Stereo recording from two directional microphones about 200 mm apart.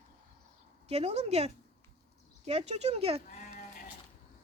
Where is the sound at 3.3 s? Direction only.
40° left (ahead or behind).